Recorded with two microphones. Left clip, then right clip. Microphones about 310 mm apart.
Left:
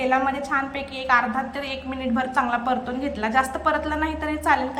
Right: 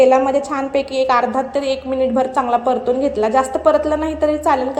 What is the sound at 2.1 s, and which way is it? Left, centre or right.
A woman's voice, centre.